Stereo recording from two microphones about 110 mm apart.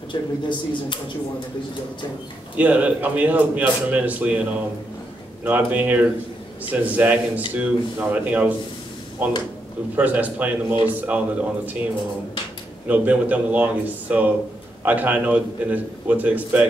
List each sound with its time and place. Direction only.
0.1 s speech: 45° left (ahead or behind)
2.5 s a man's voice: 15° right (ahead or behind)
9.9 s a man's voice: 15° right (ahead or behind)